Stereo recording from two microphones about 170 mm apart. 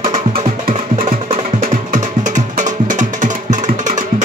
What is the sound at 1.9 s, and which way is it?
Music, 45° right (ahead or behind).